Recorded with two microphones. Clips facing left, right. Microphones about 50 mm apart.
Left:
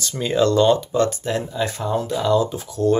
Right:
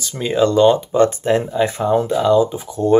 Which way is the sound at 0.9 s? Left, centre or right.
Right.